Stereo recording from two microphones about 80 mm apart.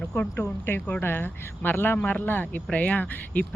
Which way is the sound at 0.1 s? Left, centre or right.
Left.